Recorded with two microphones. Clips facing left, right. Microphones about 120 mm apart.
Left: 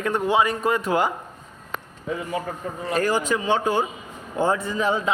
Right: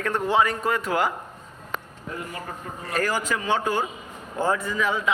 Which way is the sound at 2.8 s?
25° left (ahead or behind).